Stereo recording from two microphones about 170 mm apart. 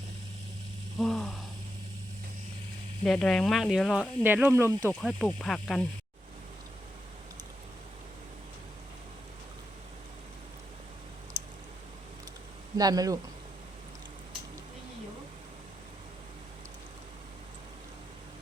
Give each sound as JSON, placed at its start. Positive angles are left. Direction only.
{"t": 0.9, "sound": "a sound", "side_deg": 0}
{"t": 3.0, "sound": "speech", "side_deg": 0}
{"t": 4.2, "sound": "speech", "side_deg": -10}
{"t": 4.9, "sound": "speech", "side_deg": 0}
{"t": 12.7, "sound": "speech", "side_deg": -20}